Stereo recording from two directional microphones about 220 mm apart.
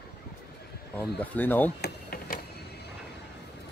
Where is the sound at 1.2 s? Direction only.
10° left (ahead or behind).